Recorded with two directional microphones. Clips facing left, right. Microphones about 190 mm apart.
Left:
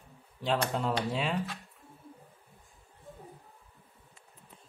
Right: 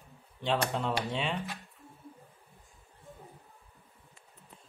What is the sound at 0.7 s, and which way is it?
Speech, centre (ahead or behind).